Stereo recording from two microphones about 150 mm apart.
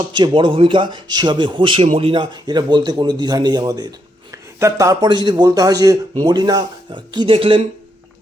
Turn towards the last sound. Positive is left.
turn(degrees=-35)  # may be behind; listen again after turning